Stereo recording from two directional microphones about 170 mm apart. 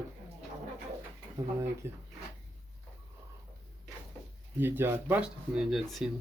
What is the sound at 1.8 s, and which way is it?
Speech, 15° right (ahead or behind).